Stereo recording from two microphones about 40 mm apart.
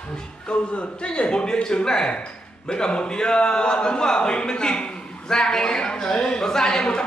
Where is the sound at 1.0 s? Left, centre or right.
Left.